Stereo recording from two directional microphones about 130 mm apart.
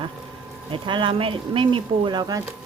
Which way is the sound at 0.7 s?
40° right (ahead or behind).